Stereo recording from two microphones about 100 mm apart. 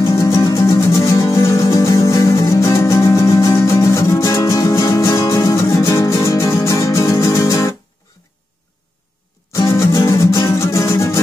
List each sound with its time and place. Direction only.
0.0 s music: 30° left (ahead or behind)
9.5 s music: 30° left (ahead or behind)